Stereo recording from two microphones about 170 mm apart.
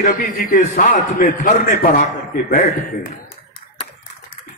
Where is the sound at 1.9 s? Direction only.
60° left (ahead or behind).